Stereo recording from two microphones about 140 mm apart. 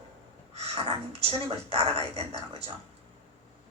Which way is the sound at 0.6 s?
45° right (ahead or behind).